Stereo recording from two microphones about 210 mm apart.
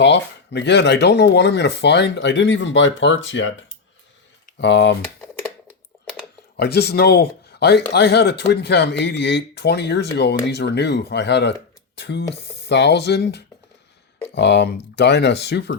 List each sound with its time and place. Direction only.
0.0 s speech: 55° left (ahead or behind)
4.5 s speech: 55° left (ahead or behind)
6.6 s speech: 50° left (ahead or behind)